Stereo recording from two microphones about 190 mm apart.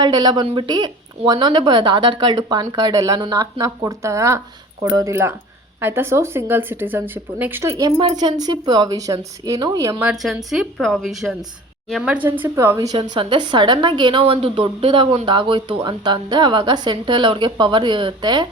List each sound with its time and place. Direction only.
0.0 s a woman's voice: 25° right (ahead or behind)
10.1 s a woman's voice: centre (ahead or behind); by 18.4 s 25° right (ahead or behind)